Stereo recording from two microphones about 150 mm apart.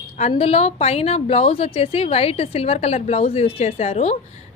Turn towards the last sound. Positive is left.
turn(degrees=45)  # may be behind; listen again after turning